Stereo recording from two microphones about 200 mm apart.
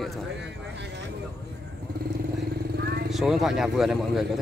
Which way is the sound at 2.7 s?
50° right (ahead or behind).